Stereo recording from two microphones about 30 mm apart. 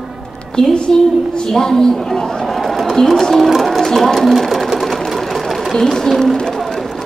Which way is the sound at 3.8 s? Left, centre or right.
Centre.